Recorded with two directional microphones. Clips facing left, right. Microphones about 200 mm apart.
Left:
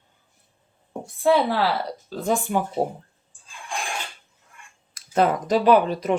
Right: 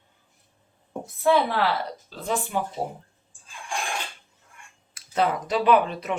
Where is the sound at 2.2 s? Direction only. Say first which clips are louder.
Left 4 dB; 45° left (ahead or behind).